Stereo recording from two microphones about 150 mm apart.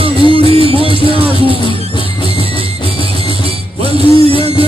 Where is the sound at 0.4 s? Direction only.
40° right (ahead or behind).